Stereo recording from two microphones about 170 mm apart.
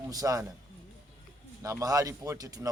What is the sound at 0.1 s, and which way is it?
Speech, 20° right (ahead or behind).